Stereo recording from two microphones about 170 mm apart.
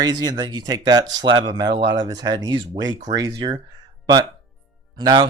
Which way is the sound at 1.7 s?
90° right.